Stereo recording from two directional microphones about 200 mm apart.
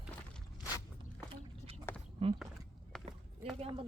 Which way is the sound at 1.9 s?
10° left (ahead or behind).